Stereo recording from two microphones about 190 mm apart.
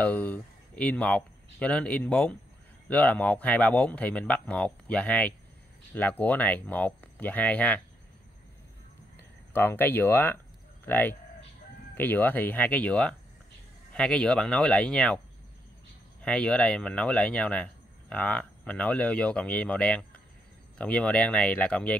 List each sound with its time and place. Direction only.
0.0 s speech: 10° left (ahead or behind)
9.5 s speech: 10° left (ahead or behind)
16.2 s speech: 5° left (ahead or behind)